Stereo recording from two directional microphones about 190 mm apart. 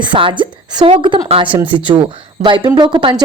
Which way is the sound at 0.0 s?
25° right (ahead or behind).